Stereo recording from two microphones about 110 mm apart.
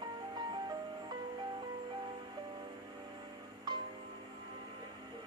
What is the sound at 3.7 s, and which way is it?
Music, 45° right (ahead or behind).